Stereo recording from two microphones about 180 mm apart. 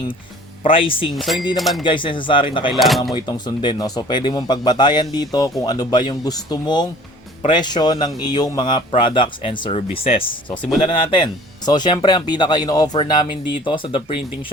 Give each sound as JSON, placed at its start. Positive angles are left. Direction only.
{"t": 0.7, "sound": "speech", "side_deg": 30}
{"t": 1.1, "sound": "speech", "side_deg": 0}
{"t": 1.8, "sound": "speech", "side_deg": 25}
{"t": 2.7, "sound": "speech", "side_deg": 0}
{"t": 3.2, "sound": "speech", "side_deg": 25}